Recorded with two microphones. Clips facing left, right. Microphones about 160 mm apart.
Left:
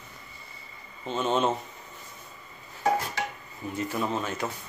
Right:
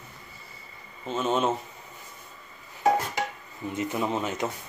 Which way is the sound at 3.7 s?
20° right (ahead or behind).